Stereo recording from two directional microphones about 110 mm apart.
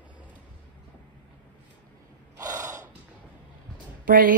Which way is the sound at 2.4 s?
30° right (ahead or behind).